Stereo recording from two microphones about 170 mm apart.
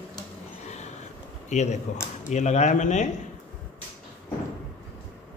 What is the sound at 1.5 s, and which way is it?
A man's voice, 40° left (ahead or behind).